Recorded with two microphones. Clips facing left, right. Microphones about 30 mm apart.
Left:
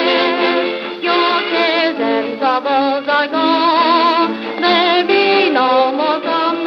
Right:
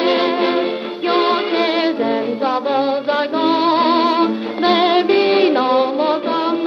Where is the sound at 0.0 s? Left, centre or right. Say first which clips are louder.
Left 2 dB; centre.